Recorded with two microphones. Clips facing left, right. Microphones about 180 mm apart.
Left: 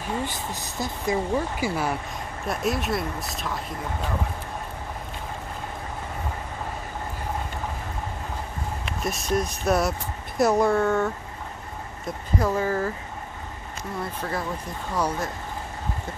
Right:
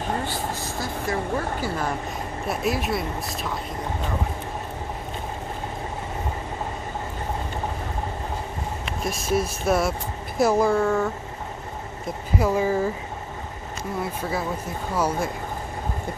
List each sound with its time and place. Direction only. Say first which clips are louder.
0.3 s speech: right 4 dB; 20° left (ahead or behind)
2.4 s speech: right 1 dB; centre (ahead or behind)
9.0 s speech: right 1 dB; centre (ahead or behind)
12.4 s speech: right 3 dB; 10° right (ahead or behind)
15.0 s speech: right 2 dB; 10° right (ahead or behind)